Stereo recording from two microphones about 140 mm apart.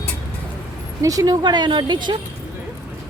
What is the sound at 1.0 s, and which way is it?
Speech, 25° right (ahead or behind).